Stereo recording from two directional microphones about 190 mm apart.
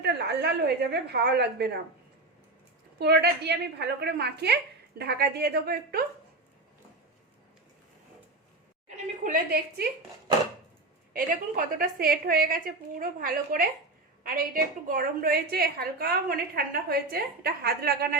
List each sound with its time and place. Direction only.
0.0 s a woman's voice: 60° right (ahead or behind)
3.0 s a woman's voice: 60° right (ahead or behind)
9.2 s a woman's voice: 50° right (ahead or behind)
11.1 s a woman's voice: 45° right (ahead or behind)